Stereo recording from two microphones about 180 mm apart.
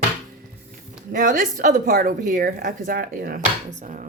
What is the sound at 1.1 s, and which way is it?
Speech, 50° right (ahead or behind).